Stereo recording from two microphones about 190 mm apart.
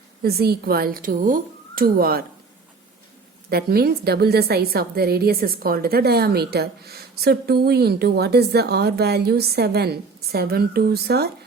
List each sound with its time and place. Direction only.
0.2 s speech: 55° right (ahead or behind)
3.5 s a woman's voice: 55° right (ahead or behind)